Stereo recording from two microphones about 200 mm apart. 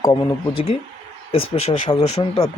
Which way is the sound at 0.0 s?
25° left (ahead or behind).